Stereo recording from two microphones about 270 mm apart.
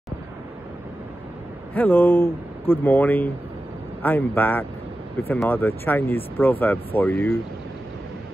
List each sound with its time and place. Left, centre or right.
1.7 s speech: centre